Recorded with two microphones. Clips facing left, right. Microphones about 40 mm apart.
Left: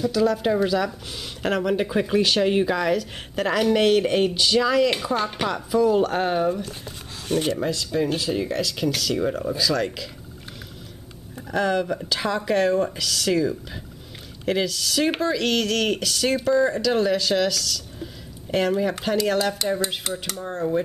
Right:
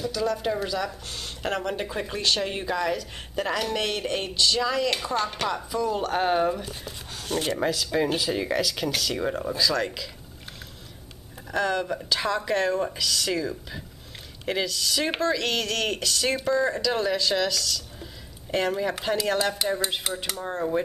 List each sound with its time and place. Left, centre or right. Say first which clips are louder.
0.0 s speech: left 6 dB; centre
7.9 s speech: left 3 dB; centre
11.5 s speech: left 3 dB; centre